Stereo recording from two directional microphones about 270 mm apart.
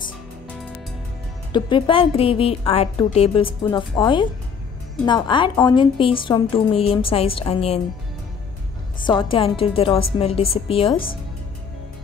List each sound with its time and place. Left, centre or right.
1.5 s a woman's voice: centre
9.0 s a woman's voice: centre